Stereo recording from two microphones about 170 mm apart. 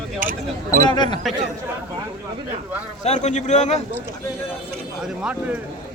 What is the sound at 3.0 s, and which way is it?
Speech, 40° left (ahead or behind).